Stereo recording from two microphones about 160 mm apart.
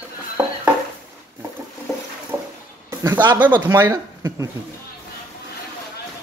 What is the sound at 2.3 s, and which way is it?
Music, 15° right (ahead or behind).